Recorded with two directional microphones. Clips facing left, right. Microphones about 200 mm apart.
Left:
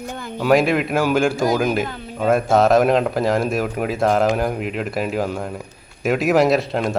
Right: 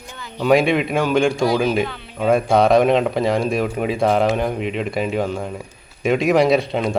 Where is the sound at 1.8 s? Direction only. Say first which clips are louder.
Left 1 dB; 45° left (ahead or behind).